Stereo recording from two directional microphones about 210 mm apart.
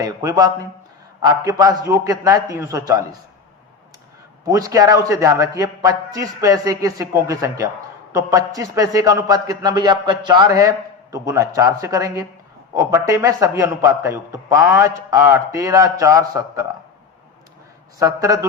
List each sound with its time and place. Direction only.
0.0 s a man's voice: 15° right (ahead or behind)
4.4 s a man's voice: 15° right (ahead or behind)
18.0 s a man's voice: 15° right (ahead or behind)